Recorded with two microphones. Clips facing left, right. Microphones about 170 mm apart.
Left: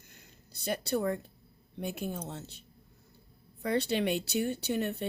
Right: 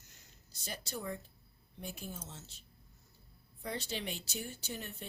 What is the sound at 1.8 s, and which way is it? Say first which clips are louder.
Speech: left 9 dB; 65° left (ahead or behind).